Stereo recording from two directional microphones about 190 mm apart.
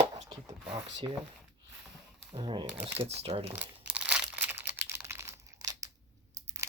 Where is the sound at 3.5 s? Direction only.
5° right (ahead or behind).